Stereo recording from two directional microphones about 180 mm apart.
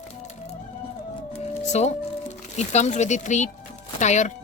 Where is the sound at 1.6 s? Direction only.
40° left (ahead or behind).